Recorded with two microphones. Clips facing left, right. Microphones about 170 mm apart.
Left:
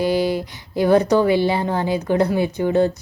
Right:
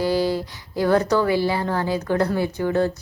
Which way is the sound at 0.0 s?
20° left (ahead or behind).